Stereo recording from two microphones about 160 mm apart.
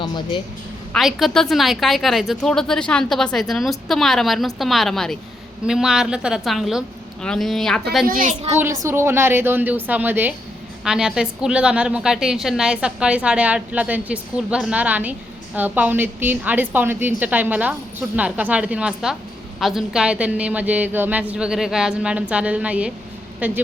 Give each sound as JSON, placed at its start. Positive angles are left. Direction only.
{"t": 0.0, "sound": "a woman's voice", "side_deg": 30}
{"t": 0.9, "sound": "a woman's voice", "side_deg": 0}
{"t": 8.0, "sound": "a child's voice", "side_deg": -60}
{"t": 8.5, "sound": "a woman's voice", "side_deg": -15}